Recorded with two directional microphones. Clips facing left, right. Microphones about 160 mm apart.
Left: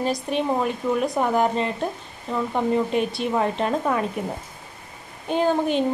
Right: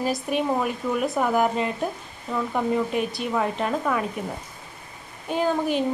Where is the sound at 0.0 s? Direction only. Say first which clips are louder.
Left 1 dB; 5° right (ahead or behind).